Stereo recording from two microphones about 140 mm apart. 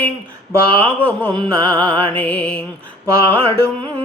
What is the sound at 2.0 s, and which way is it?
Mantra, 10° left (ahead or behind).